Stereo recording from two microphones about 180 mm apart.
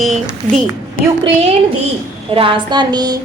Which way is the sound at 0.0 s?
Centre (ahead or behind).